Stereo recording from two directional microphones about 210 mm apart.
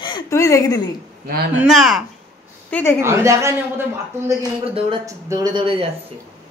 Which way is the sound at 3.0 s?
15° right (ahead or behind).